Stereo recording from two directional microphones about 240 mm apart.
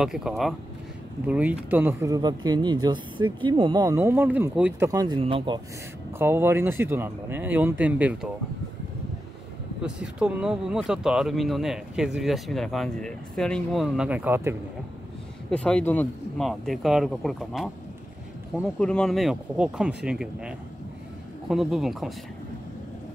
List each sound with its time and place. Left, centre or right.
0.0 s speech: centre; by 5.6 s right
6.1 s speech: centre
9.8 s speech: centre
15.5 s speech: centre